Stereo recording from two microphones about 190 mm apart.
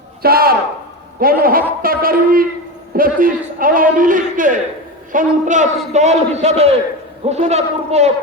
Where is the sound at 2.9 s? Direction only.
50° right (ahead or behind).